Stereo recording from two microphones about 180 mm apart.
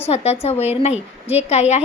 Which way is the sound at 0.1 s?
35° left (ahead or behind).